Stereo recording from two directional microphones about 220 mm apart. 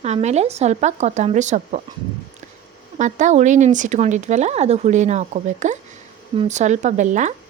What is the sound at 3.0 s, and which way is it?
Speech, 35° right (ahead or behind).